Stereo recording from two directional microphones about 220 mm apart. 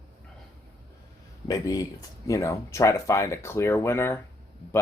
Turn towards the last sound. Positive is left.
turn(degrees=10)  # may be behind; listen again after turning